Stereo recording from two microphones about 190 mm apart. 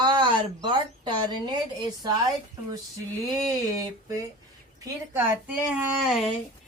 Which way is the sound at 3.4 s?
20° right (ahead or behind).